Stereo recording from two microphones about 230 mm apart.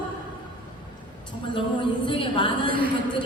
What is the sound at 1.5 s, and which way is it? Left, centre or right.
A woman's voice, left.